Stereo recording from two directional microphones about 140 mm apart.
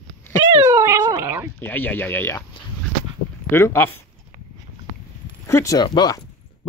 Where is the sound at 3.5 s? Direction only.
15° left (ahead or behind).